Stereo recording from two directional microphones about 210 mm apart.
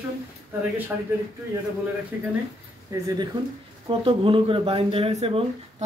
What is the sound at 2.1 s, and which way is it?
Speech, 10° right (ahead or behind).